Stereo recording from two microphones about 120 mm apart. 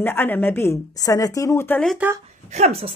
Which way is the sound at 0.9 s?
30° left (ahead or behind).